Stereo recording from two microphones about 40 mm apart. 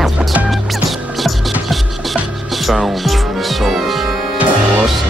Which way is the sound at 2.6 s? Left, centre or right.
Centre.